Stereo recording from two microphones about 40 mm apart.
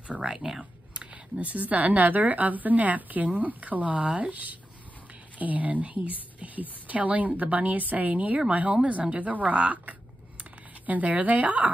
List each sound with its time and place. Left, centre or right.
0.2 s speech: centre
1.4 s a woman's voice: right